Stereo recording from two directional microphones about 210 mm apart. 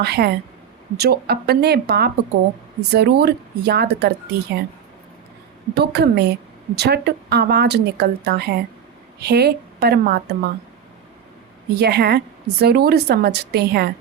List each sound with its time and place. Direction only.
0.0 s a woman's voice: 50° right (ahead or behind)
5.7 s a woman's voice: 50° right (ahead or behind)
11.7 s a woman's voice: 50° right (ahead or behind)